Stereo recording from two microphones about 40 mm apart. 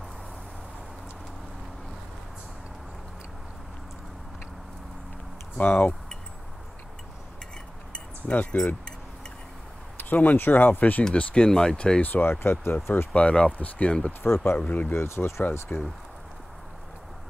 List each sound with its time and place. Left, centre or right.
5.6 s speech: left
8.5 s speech: left
9.9 s a sound: left
10.3 s speech: left
11.3 s speech: centre
12.0 s speech: left
13.1 s speech: left
14.2 s speech: left
14.7 s speech: left
15.0 s speech: left
15.7 s speech: left